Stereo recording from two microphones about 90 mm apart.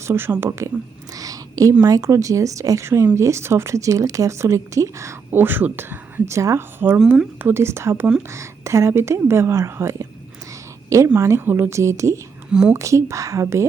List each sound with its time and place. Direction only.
0.1 s speech: 25° right (ahead or behind)
1.1 s a sound: 40° right (ahead or behind)
1.8 s speech: 40° right (ahead or behind); by 7.0 s 25° right (ahead or behind)
7.0 s speech: 5° right (ahead or behind)
7.3 s speech: 25° right (ahead or behind)
11.4 s speech: 25° right (ahead or behind)
12.5 s a woman's voice: 10° right (ahead or behind)
12.7 s speech: 35° right (ahead or behind)